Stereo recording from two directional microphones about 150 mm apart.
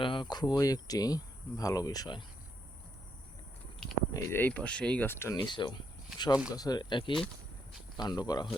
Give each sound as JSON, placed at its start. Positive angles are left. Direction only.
{"t": 0.0, "sound": "speech", "side_deg": 35}
{"t": 4.1, "sound": "speech", "side_deg": 15}